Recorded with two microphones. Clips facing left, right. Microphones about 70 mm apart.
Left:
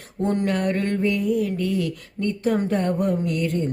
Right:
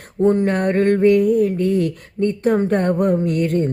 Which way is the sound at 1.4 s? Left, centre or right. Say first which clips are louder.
Right 6 dB; right.